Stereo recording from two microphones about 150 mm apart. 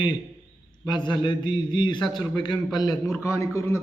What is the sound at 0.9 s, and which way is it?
A man's voice, 30° left (ahead or behind).